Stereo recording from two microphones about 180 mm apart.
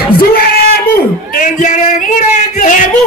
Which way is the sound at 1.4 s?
45° left (ahead or behind).